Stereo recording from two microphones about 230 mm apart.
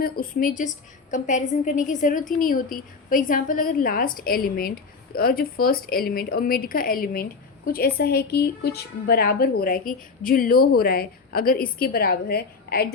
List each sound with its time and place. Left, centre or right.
0.0 s a woman's voice: left